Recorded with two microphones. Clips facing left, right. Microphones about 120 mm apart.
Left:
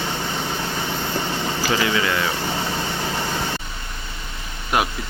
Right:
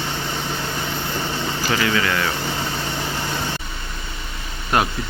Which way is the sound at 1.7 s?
20° left (ahead or behind).